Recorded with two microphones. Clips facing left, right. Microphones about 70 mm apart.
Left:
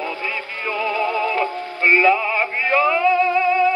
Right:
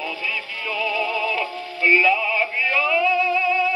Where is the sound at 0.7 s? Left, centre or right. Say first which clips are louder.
Left 3 dB; left.